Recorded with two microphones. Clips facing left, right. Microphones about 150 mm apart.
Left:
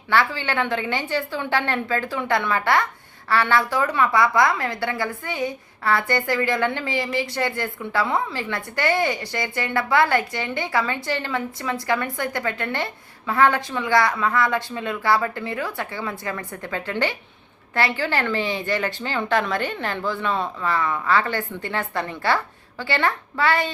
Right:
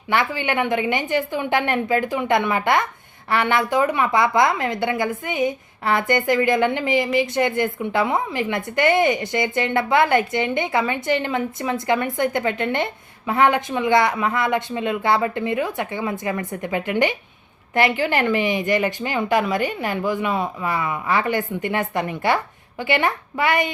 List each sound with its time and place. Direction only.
0.1 s a woman's voice: 15° right (ahead or behind)